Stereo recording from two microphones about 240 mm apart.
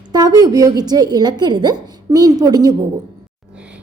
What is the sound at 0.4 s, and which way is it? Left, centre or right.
A woman's voice, centre.